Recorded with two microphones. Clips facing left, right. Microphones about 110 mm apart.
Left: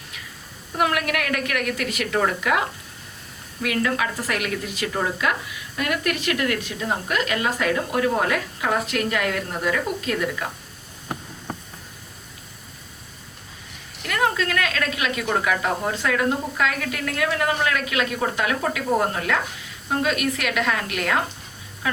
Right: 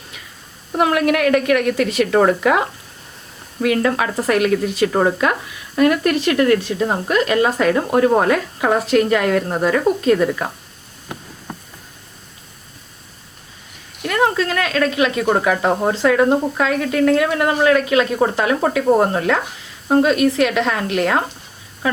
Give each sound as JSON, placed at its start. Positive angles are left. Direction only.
{"t": 0.8, "sound": "speech", "side_deg": -30}
{"t": 2.1, "sound": "speech", "side_deg": -45}
{"t": 3.6, "sound": "speech", "side_deg": -35}
{"t": 4.9, "sound": "speech", "side_deg": -50}
{"t": 14.1, "sound": "speech", "side_deg": -30}